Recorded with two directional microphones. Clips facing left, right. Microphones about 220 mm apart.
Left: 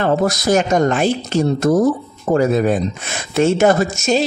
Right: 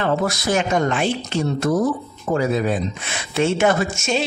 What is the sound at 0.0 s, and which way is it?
Speech, 40° left (ahead or behind).